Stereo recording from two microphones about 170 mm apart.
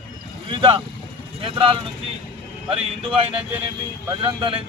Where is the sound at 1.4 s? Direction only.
35° right (ahead or behind).